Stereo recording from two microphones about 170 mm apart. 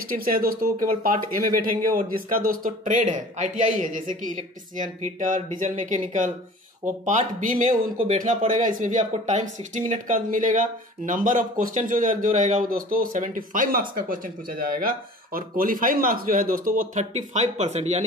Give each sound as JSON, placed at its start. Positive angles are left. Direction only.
{"t": 0.1, "sound": "speech", "side_deg": -55}